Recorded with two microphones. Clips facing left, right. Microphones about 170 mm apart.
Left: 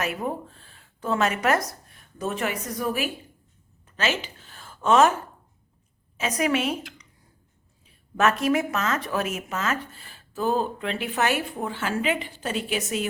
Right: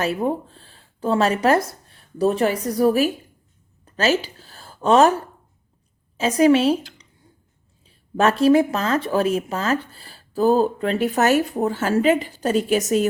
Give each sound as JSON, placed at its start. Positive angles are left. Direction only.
{"t": 0.0, "sound": "speech", "side_deg": -30}
{"t": 3.8, "sound": "a sound", "side_deg": -40}
{"t": 6.1, "sound": "a woman's voice", "side_deg": -30}